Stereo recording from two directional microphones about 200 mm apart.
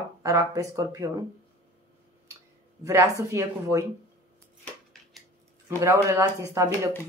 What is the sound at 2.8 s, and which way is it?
Speech, 15° right (ahead or behind).